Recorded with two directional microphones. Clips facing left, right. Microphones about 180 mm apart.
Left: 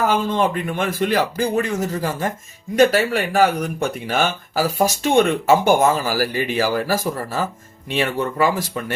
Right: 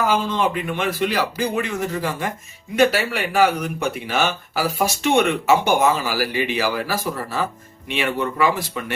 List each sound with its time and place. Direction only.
0.1 s speech: 50° left (ahead or behind)